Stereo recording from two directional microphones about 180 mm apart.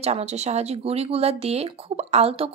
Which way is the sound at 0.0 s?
35° right (ahead or behind).